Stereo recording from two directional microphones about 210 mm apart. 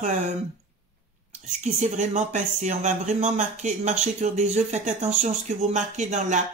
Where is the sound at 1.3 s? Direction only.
35° right (ahead or behind).